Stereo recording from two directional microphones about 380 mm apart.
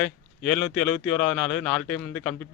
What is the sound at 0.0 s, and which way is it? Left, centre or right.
Speech, centre.